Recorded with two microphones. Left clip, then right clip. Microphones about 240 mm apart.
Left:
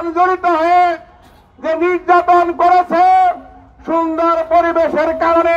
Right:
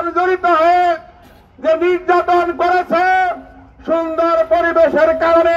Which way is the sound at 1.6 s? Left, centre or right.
Left.